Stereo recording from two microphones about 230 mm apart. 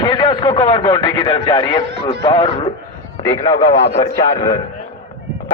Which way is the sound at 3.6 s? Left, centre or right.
Left.